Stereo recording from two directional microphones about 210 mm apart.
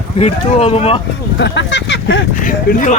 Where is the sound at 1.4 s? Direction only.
55° left (ahead or behind).